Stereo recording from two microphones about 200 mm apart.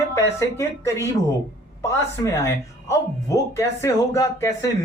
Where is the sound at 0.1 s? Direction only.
15° left (ahead or behind).